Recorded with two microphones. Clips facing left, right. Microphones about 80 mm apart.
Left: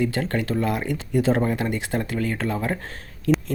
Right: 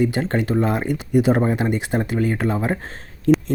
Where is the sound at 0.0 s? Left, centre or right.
Right.